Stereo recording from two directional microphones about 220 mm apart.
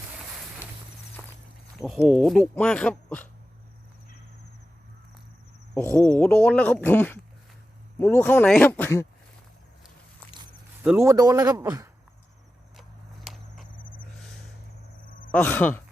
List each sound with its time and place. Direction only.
1.2 s walk: centre (ahead or behind)
2.0 s speech: centre (ahead or behind)
5.7 s speech: 10° left (ahead or behind)
10.8 s speech: 10° right (ahead or behind)
13.2 s a sound: centre (ahead or behind)
13.7 s vehicle: 40° left (ahead or behind)
15.3 s speech: 5° left (ahead or behind)